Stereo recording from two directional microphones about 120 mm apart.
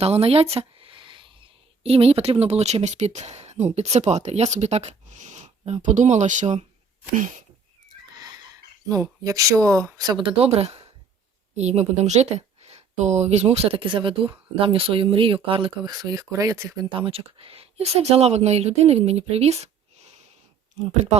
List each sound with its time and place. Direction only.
0.0 s a sound: 55° right (ahead or behind)
1.8 s speech: 55° right (ahead or behind); by 7.4 s 90° right
8.9 s speech: 25° right (ahead or behind); by 15.7 s 45° right (ahead or behind)
15.9 s speech: 30° right (ahead or behind)
16.9 s speech: 50° right (ahead or behind)
20.8 s speech: 55° right (ahead or behind)